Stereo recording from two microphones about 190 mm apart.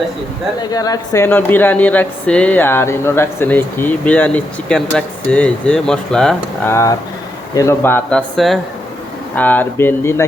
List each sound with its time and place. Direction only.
0.7 s speech: 20° left (ahead or behind); by 6.7 s 5° left (ahead or behind)
7.5 s speech: 15° left (ahead or behind)
8.4 s speech: centre (ahead or behind)